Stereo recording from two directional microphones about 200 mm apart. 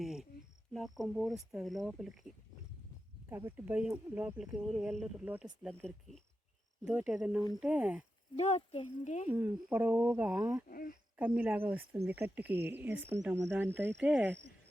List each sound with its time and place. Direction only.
0.0 s cricket: centre (ahead or behind)
0.7 s speech: centre (ahead or behind)
8.4 s speech: 30° left (ahead or behind)
9.3 s speech: 10° right (ahead or behind)
10.7 s speech: 45° left (ahead or behind)
11.3 s speech: 10° right (ahead or behind)